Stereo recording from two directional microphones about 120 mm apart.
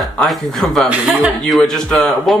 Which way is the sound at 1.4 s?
5° left (ahead or behind).